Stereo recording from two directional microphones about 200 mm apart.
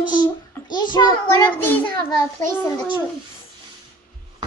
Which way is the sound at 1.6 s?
10° left (ahead or behind).